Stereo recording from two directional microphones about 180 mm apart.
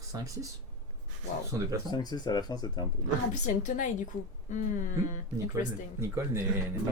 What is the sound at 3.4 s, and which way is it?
Speech, 45° left (ahead or behind).